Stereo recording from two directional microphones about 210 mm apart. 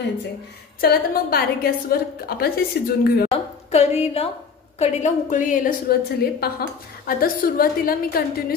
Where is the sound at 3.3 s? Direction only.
30° left (ahead or behind).